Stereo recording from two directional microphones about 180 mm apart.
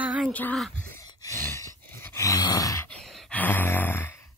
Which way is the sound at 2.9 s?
Centre (ahead or behind).